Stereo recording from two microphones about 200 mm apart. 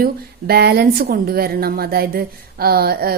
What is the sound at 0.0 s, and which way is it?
A woman's voice, 50° right (ahead or behind).